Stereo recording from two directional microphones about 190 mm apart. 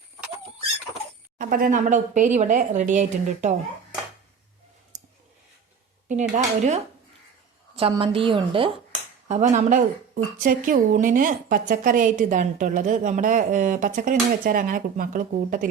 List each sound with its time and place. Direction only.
1.4 s speech: 50° right (ahead or behind)
6.3 s a woman's voice: 35° right (ahead or behind)